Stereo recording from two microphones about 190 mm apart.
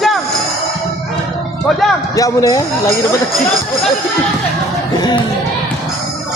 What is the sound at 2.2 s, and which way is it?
Speech, 15° left (ahead or behind).